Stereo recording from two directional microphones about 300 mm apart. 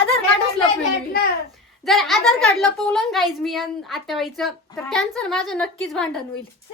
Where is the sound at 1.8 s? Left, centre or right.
Centre.